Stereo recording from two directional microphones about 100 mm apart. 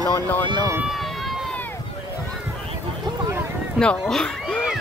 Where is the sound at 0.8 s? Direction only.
Centre (ahead or behind).